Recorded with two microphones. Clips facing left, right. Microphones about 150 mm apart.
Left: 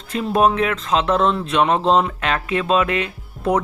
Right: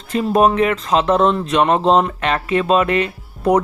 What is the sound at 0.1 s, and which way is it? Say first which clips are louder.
Speech: right 3 dB; centre (ahead or behind).